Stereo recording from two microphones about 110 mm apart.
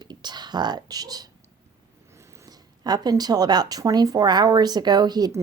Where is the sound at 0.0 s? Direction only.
40° right (ahead or behind).